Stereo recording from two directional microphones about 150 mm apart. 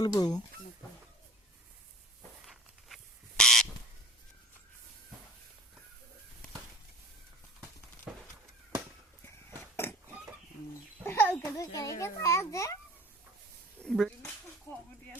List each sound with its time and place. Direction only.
0.0 s speech: 25° left (ahead or behind)
2.5 s a sound: centre (ahead or behind)
8.1 s a sound: 5° right (ahead or behind)
9.7 s pig: 15° left (ahead or behind)
11.0 s a child's voice: 15° left (ahead or behind)
13.7 s speech: centre (ahead or behind)